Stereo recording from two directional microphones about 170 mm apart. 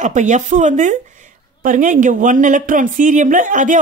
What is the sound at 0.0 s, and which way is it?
Speech, 45° right (ahead or behind).